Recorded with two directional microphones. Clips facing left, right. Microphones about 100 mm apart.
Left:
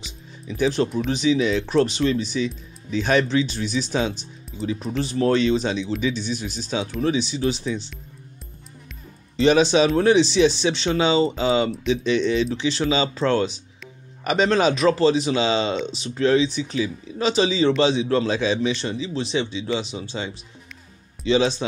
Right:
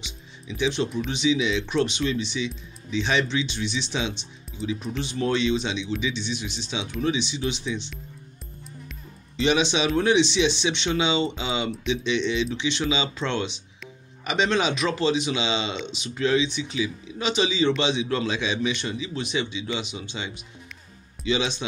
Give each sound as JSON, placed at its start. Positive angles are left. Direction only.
{"t": 0.5, "sound": "speech", "side_deg": 40}
{"t": 9.4, "sound": "speech", "side_deg": 40}